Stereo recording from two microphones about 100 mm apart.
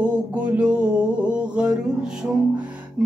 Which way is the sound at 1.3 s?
10° right (ahead or behind).